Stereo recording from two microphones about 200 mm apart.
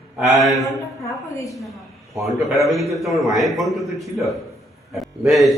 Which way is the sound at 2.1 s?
Centre (ahead or behind).